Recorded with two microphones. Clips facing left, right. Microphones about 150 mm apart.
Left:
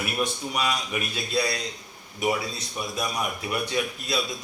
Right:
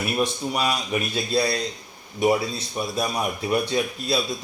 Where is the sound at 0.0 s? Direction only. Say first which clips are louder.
Right 4 dB; 30° right (ahead or behind).